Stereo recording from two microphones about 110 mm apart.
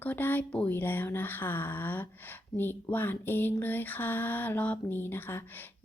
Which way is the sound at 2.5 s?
20° left (ahead or behind).